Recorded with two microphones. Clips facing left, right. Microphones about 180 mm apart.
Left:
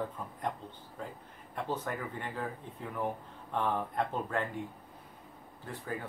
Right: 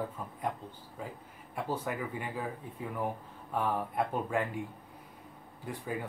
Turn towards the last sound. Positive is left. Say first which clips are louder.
# right 3 dB
turn(degrees=-15)  # may be behind; listen again after turning